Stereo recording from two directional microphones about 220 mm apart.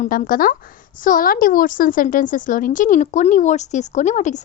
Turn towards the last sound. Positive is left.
turn(degrees=35)  # may be behind; listen again after turning